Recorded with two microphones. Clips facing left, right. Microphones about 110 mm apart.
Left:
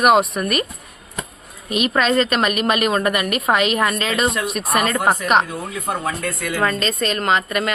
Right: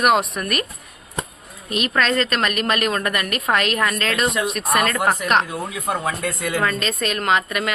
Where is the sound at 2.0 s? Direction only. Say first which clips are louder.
Left 3 dB; 5° left (ahead or behind).